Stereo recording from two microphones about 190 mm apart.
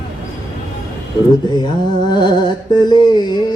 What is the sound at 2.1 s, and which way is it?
Carnatic music, 25° left (ahead or behind).